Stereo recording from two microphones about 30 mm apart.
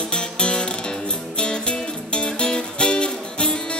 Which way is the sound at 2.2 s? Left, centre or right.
Left.